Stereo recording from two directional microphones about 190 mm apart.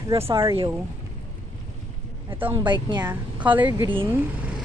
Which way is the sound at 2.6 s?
25° right (ahead or behind).